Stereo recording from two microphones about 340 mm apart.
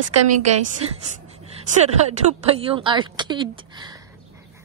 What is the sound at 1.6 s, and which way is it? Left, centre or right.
A woman's voice, centre.